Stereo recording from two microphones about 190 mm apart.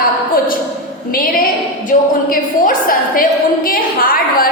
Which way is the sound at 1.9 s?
45° left (ahead or behind).